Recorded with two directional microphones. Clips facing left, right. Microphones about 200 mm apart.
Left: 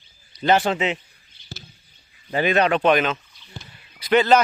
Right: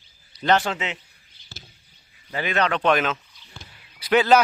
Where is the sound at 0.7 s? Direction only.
20° left (ahead or behind).